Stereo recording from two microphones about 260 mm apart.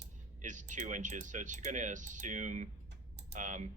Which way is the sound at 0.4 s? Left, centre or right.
Right.